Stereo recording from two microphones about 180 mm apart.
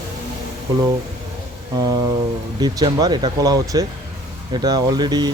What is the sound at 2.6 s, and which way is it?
Speech, 20° right (ahead or behind).